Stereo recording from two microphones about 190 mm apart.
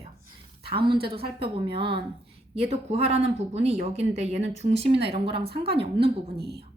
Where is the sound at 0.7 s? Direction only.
25° right (ahead or behind).